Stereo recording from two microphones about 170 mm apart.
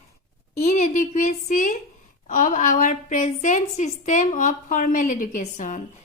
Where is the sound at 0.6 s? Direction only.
45° left (ahead or behind).